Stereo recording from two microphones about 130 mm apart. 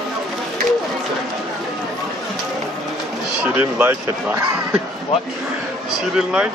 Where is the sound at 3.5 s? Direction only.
10° right (ahead or behind).